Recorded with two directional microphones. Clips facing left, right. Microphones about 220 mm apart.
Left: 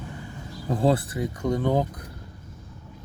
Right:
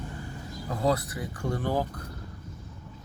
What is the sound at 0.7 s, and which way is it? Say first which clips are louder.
Speech: left 5 dB; 30° left (ahead or behind).